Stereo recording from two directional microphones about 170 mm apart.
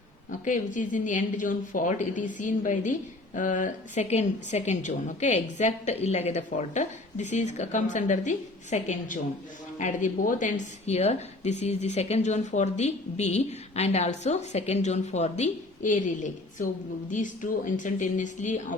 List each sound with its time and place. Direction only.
0.3 s a woman's voice: 50° left (ahead or behind)